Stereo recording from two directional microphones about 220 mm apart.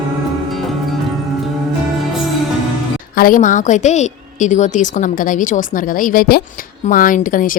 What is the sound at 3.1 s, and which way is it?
A woman's voice, 40° left (ahead or behind).